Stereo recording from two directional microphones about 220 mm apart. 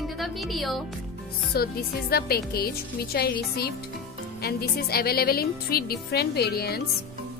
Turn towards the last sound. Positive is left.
turn(degrees=45)  # may be behind; listen again after turning